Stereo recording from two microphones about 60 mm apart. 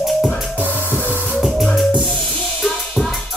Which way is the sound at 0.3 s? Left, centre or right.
Left.